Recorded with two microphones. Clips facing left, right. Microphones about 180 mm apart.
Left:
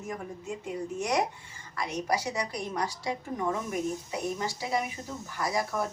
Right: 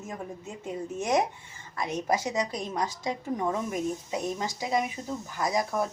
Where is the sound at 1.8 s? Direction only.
20° right (ahead or behind).